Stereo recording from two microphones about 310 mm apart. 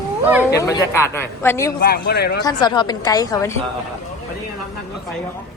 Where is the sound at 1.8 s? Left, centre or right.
Left.